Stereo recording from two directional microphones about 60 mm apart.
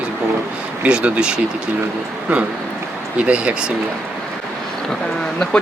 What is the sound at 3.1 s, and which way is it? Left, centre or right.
Speech, right.